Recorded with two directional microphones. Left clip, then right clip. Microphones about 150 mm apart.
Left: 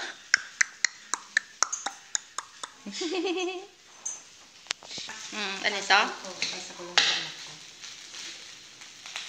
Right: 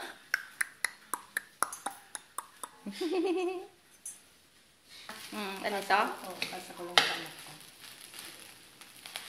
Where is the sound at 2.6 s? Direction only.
10° right (ahead or behind).